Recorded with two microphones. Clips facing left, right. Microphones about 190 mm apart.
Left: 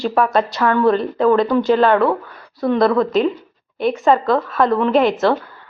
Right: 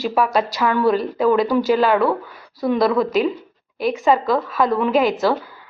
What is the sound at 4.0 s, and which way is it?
A woman's voice, 5° right (ahead or behind).